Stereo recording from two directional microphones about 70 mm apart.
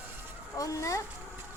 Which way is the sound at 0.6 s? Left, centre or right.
Left.